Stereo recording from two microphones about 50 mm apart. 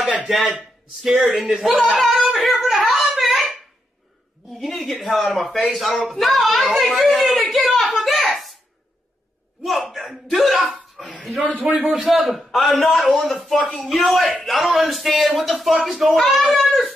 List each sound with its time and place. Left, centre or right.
0.3 s speech: centre
2.2 s a sound: centre
4.6 s speech: centre
6.7 s a sound: centre
9.7 s speech: centre
11.5 s a man's voice: right
11.9 s speech: centre